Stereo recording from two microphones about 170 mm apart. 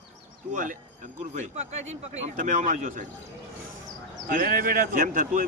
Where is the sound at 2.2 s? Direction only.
45° right (ahead or behind).